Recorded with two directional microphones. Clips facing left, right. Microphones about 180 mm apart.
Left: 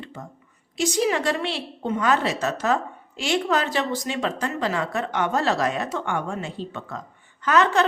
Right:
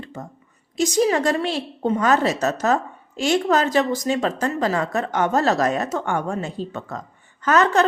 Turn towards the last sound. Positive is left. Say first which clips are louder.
# right 2 dB
turn(degrees=-45)  # may be behind; listen again after turning